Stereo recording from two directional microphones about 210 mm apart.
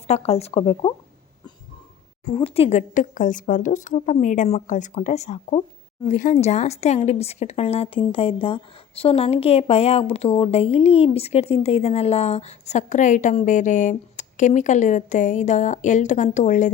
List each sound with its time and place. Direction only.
0.1 s speech: 30° left (ahead or behind)
2.2 s speech: 25° left (ahead or behind)